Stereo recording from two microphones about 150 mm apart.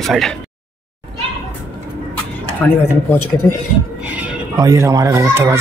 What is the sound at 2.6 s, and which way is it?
Speech, 15° left (ahead or behind).